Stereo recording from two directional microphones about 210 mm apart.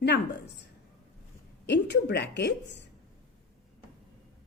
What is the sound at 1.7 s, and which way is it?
Speech, 55° left (ahead or behind).